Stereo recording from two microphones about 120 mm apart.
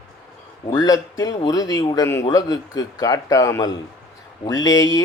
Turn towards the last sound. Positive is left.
turn(degrees=30)  # may be behind; listen again after turning